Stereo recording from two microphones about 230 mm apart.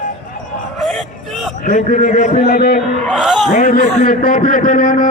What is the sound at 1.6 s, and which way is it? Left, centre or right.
A man's voice, left.